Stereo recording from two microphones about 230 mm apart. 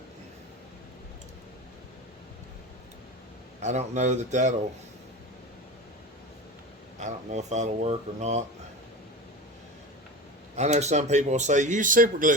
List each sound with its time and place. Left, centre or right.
3.6 s speech: right
7.0 s speech: right
10.5 s speech: right